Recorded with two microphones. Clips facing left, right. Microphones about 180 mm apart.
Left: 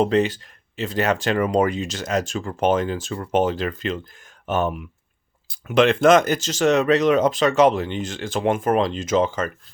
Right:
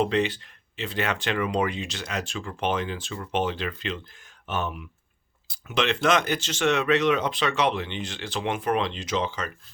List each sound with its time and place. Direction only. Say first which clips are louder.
0.0 s speech: left 5 dB; 40° left (ahead or behind)